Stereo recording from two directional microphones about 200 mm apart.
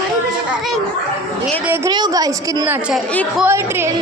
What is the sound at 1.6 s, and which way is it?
A woman's voice, 10° right (ahead or behind).